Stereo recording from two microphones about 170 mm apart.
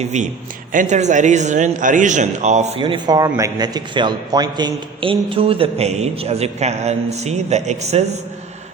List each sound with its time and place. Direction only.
0.0 s a man's voice: 45° right (ahead or behind)